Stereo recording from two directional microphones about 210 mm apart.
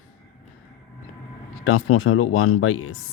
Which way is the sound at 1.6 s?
80° left.